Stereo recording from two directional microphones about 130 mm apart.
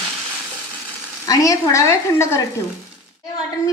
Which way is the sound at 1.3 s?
25° left (ahead or behind).